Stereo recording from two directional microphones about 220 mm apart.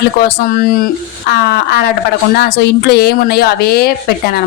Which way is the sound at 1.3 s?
45° left (ahead or behind).